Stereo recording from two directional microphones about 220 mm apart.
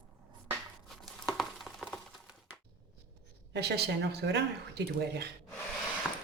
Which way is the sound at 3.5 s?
50° right (ahead or behind).